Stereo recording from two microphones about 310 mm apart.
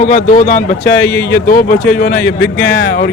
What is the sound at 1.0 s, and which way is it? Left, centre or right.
Speech, centre.